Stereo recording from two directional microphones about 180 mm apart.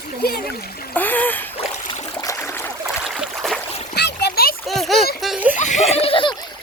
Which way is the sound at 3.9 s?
65° left (ahead or behind).